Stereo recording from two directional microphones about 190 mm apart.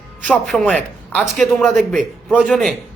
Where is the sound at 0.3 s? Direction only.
Centre (ahead or behind).